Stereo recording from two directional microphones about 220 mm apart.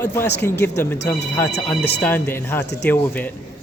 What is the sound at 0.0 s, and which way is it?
Speech, 10° left (ahead or behind).